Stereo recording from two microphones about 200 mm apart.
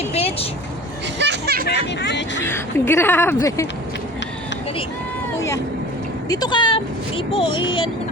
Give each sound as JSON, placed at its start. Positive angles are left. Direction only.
{"t": 0.1, "sound": "vehicle", "side_deg": 30}
{"t": 1.2, "sound": "music", "side_deg": -55}
{"t": 1.6, "sound": "vehicle", "side_deg": 60}
{"t": 2.4, "sound": "speech", "side_deg": 10}
{"t": 6.2, "sound": "speech", "side_deg": 20}